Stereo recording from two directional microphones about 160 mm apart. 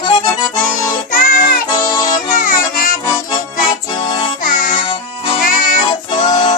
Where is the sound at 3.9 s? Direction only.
30° left (ahead or behind).